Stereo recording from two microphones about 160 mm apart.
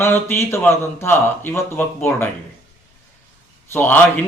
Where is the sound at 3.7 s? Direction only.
10° left (ahead or behind).